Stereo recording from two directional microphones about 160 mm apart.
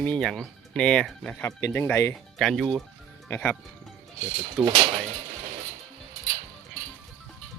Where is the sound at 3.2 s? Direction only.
15° left (ahead or behind).